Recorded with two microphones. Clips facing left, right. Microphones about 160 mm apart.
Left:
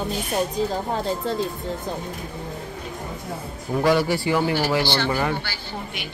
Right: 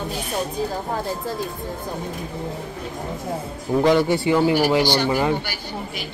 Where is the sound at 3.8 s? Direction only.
20° right (ahead or behind).